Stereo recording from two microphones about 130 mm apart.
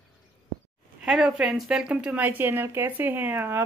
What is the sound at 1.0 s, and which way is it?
Speech, 5° right (ahead or behind).